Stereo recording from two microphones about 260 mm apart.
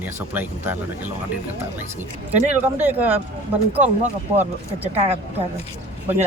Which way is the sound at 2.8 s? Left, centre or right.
Centre.